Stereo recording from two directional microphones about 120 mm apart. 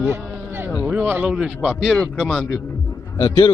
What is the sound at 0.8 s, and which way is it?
A man's voice, 15° right (ahead or behind).